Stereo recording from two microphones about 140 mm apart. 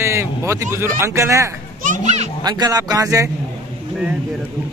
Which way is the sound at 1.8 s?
60° right (ahead or behind).